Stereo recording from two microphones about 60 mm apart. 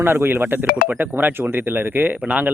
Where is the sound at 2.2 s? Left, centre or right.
Right.